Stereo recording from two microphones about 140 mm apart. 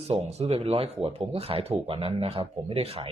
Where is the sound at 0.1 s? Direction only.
45° right (ahead or behind).